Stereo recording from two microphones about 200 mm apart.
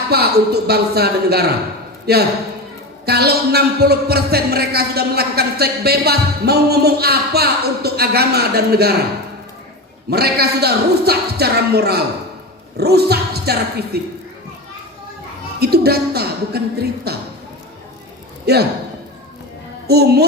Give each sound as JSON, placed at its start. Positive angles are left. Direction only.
{"t": 0.1, "sound": "a man's voice", "side_deg": -50}
{"t": 10.1, "sound": "a man's voice", "side_deg": -50}
{"t": 15.6, "sound": "a man's voice", "side_deg": -50}
{"t": 18.5, "sound": "a man's voice", "side_deg": -55}
{"t": 19.9, "sound": "a man's voice", "side_deg": -50}